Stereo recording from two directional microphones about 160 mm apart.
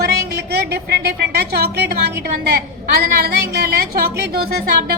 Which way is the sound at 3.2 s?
75° right (ahead or behind).